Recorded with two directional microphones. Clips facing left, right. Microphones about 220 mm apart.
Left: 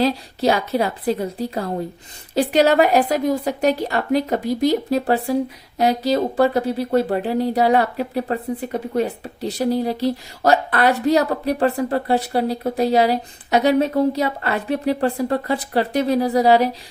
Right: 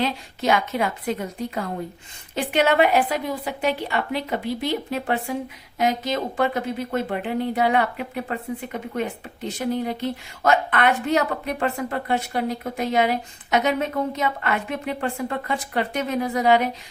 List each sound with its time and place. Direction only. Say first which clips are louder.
0.0 s a woman's voice: left 6 dB; 35° left (ahead or behind)